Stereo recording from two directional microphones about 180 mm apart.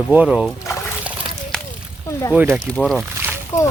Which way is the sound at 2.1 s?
15° left (ahead or behind).